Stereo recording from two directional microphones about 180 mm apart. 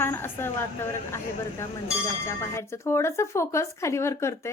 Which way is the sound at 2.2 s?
15° left (ahead or behind).